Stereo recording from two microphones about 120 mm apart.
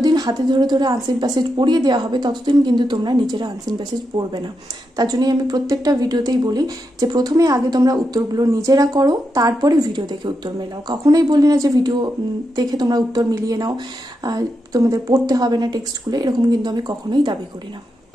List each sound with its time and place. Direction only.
0.0 s speech: 35° right (ahead or behind)